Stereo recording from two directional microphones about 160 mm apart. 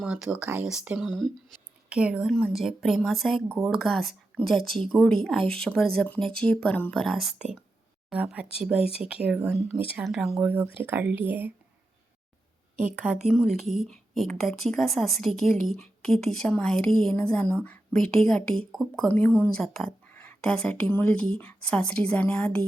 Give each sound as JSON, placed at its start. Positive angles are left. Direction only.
{"t": 0.0, "sound": "a woman's voice", "side_deg": -5}
{"t": 12.8, "sound": "a woman's voice", "side_deg": -5}